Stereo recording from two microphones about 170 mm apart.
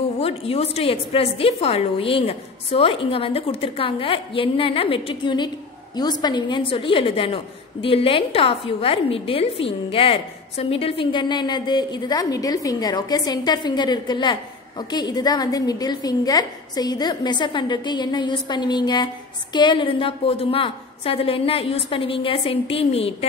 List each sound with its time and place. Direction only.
0.2 s a woman's voice: 35° left (ahead or behind)